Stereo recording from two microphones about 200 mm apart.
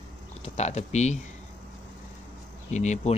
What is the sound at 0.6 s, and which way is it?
Speech, 35° left (ahead or behind).